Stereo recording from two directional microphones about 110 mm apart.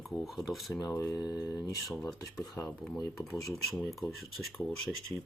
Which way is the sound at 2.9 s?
35° left (ahead or behind).